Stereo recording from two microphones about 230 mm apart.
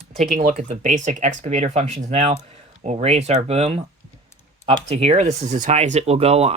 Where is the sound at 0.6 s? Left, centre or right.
Right.